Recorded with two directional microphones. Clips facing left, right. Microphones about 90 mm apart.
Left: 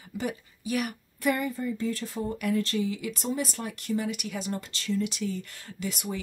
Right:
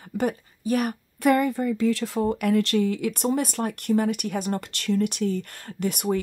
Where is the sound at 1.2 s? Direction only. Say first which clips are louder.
Right 7 dB; 60° right (ahead or behind).